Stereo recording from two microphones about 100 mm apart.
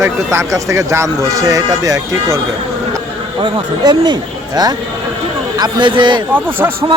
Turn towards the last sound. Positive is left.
turn(degrees=-20)  # may be behind; listen again after turning